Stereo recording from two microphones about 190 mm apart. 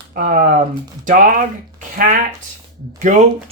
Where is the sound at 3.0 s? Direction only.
40° right (ahead or behind).